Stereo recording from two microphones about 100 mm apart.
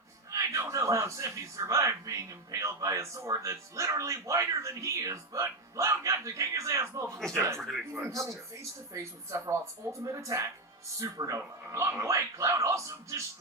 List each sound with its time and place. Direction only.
0.3 s a man's voice: 35° right (ahead or behind)
7.6 s speech: centre (ahead or behind)
7.9 s a man's voice: 30° right (ahead or behind)